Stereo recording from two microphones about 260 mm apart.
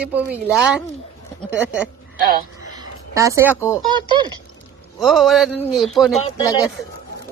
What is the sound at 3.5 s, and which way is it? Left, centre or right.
Speech, centre.